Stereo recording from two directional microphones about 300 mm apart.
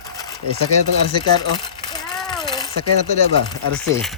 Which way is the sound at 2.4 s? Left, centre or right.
Centre.